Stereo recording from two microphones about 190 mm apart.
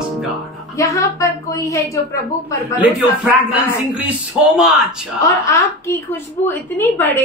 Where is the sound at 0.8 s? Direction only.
15° left (ahead or behind).